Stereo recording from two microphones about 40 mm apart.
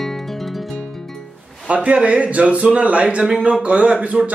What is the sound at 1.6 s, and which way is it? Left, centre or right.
Speech, right.